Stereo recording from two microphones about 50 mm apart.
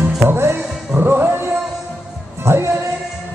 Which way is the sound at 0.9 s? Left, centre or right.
Right.